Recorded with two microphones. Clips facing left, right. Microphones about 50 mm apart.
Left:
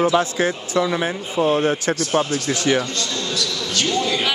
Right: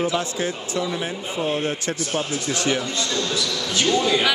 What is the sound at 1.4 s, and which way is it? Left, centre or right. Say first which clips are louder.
Speech: left 7 dB; left.